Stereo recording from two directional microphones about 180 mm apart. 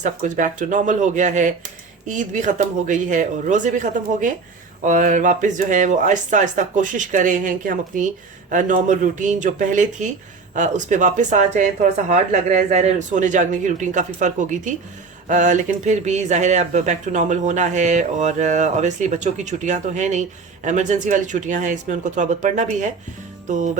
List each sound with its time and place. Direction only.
0.0 s speech: 45° right (ahead or behind)